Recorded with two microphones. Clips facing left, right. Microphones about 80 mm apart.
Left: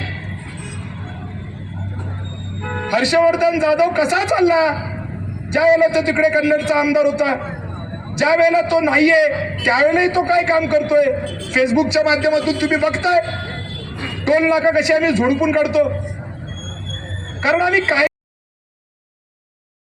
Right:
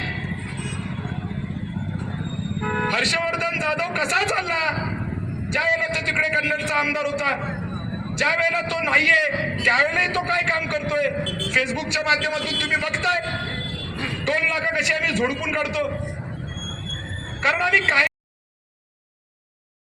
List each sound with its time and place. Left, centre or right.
2.9 s a man's voice: centre
14.3 s a man's voice: centre
17.4 s a man's voice: centre